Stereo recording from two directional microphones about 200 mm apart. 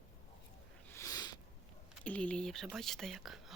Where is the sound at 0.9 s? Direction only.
20° left (ahead or behind).